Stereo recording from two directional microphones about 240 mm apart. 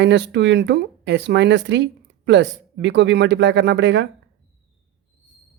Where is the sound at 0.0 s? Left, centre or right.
Right.